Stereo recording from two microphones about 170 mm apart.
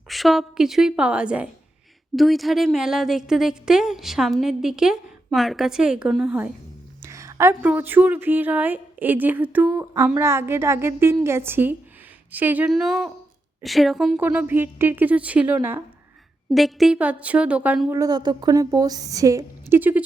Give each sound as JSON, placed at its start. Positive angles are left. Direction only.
{"t": 0.1, "sound": "a woman's voice", "side_deg": 0}
{"t": 7.0, "sound": "a woman's voice", "side_deg": -15}
{"t": 14.2, "sound": "speech", "side_deg": -10}
{"t": 16.5, "sound": "speech", "side_deg": 0}